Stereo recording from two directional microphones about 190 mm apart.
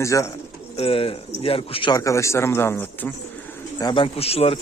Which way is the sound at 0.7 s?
30° left (ahead or behind).